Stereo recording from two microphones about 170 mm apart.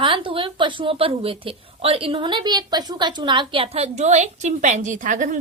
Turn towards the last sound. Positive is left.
turn(degrees=-50)  # may be behind; listen again after turning